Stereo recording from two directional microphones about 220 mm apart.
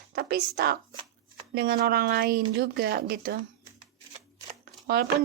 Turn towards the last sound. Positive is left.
turn(degrees=-45)  # may be behind; listen again after turning